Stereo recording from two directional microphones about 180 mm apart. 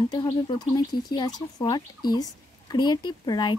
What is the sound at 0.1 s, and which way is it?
Speech, 25° left (ahead or behind).